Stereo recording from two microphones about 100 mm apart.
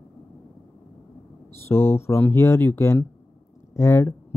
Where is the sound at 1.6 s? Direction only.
25° left (ahead or behind).